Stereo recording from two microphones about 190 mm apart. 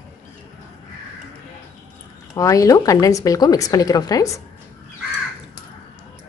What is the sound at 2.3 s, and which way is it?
Speech, 15° left (ahead or behind).